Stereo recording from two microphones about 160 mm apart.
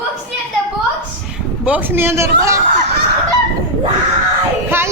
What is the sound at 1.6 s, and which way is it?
Speech, 10° right (ahead or behind).